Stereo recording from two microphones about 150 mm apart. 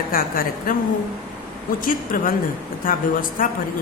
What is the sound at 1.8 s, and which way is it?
Speech, 65° left (ahead or behind).